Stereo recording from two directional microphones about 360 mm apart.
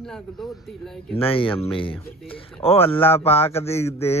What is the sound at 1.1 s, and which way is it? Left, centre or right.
A man's voice, centre.